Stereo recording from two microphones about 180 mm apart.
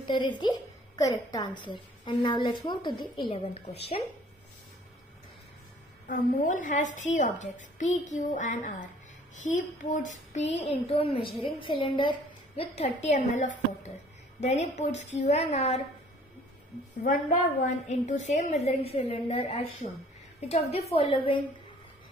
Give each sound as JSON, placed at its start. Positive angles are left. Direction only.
{"t": 0.0, "sound": "a woman's voice", "side_deg": 25}
{"t": 6.0, "sound": "a woman's voice", "side_deg": 45}
{"t": 17.0, "sound": "a woman's voice", "side_deg": 50}